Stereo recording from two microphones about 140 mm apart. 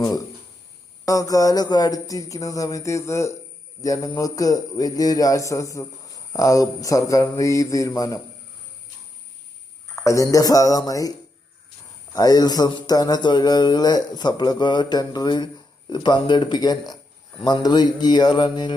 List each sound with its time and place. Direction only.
1.0 s speech: 25° left (ahead or behind)
9.9 s speech: 20° left (ahead or behind)
12.1 s speech: 25° left (ahead or behind)